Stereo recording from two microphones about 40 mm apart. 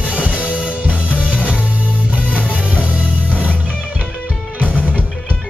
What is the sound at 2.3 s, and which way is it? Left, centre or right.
Music, left.